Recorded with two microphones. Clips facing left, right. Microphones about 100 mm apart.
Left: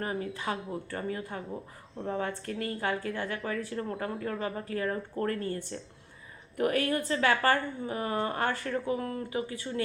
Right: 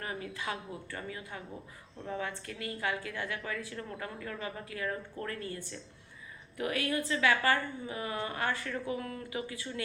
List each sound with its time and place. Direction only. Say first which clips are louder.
0.0 s speech: left 5 dB; 35° left (ahead or behind)